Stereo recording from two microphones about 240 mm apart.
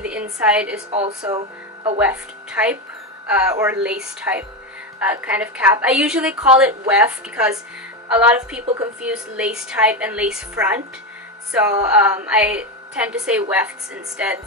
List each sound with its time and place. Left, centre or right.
0.0 s a woman's voice: centre
1.0 s speech: centre
2.0 s a woman's voice: centre